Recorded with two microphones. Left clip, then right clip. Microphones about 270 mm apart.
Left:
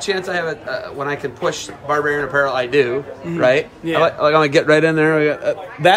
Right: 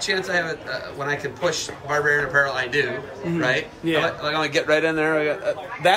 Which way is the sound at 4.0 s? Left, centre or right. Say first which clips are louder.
Left 11 dB; centre.